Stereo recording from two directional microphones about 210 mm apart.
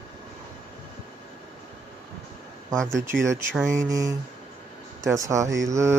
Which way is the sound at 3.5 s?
15° right (ahead or behind).